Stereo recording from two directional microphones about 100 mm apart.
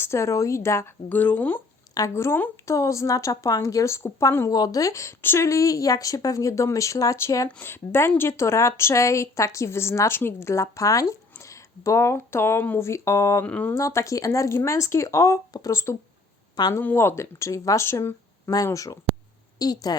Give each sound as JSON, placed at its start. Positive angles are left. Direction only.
{"t": 0.0, "sound": "speech", "side_deg": 25}
{"t": 1.1, "sound": "a woman's voice", "side_deg": 15}
{"t": 13.4, "sound": "speech", "side_deg": 15}
{"t": 13.7, "sound": "a woman's voice", "side_deg": 30}